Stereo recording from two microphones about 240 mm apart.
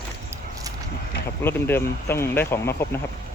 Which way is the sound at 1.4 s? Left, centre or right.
Centre.